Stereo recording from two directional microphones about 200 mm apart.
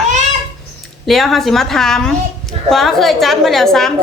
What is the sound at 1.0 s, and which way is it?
A woman's voice, centre (ahead or behind).